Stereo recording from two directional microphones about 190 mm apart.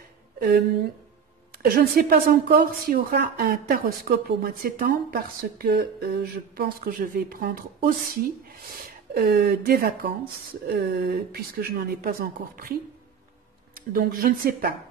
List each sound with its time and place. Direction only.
1.5 s a woman's voice: 55° right (ahead or behind)
13.7 s a woman's voice: 50° right (ahead or behind)